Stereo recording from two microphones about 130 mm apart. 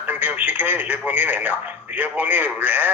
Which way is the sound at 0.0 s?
15° right (ahead or behind).